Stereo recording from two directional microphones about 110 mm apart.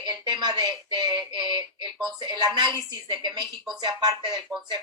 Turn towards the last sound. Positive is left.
turn(degrees=-40)  # may be behind; listen again after turning